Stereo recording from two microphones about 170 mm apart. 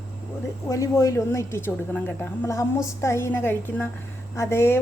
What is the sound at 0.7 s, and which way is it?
A woman's voice, 20° left (ahead or behind).